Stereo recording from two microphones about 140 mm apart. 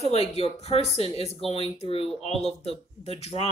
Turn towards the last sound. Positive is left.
turn(degrees=45)  # may be behind; listen again after turning